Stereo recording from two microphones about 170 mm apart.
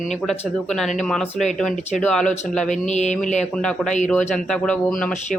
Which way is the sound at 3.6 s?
5° left (ahead or behind).